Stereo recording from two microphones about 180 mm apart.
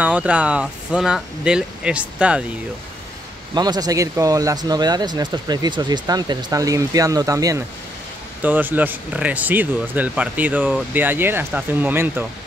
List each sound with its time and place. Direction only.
0.0 s speech: 10° right (ahead or behind)
3.5 s speech: 20° right (ahead or behind)